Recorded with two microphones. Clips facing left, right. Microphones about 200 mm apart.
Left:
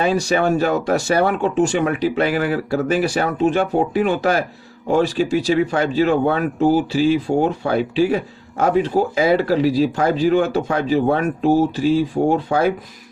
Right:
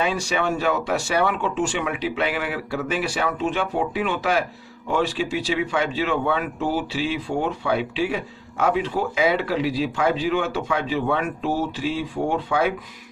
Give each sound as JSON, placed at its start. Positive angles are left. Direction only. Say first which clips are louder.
{"t": 0.0, "sound": "speech", "louder": "left 6 dB", "side_deg": 40}